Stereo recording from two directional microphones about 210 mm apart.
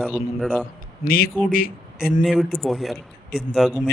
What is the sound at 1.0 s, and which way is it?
A man's voice, 45° left (ahead or behind).